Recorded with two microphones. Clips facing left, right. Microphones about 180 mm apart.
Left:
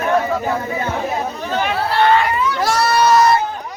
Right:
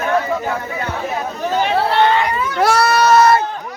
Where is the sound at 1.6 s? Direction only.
25° right (ahead or behind).